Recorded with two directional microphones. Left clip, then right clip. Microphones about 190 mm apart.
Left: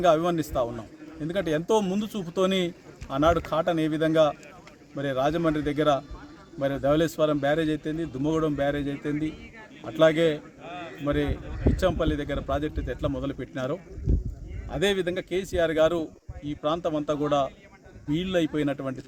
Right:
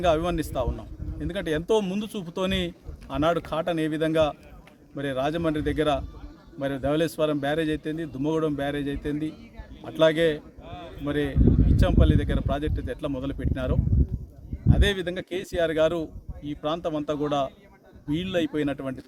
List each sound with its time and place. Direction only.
0.0 s a man's voice: 5° right (ahead or behind)
10.6 s a sound: 70° right (ahead or behind)
11.0 s a man's voice: 5° right (ahead or behind)